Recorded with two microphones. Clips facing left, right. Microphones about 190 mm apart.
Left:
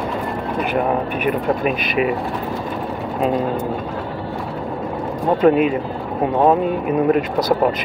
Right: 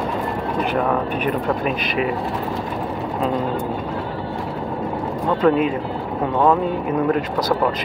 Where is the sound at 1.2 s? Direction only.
15° left (ahead or behind).